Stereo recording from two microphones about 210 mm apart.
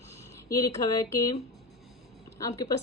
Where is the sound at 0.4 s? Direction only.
15° left (ahead or behind).